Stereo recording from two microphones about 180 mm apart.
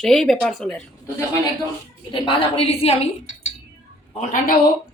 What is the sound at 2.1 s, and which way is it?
A woman's voice, 30° left (ahead or behind).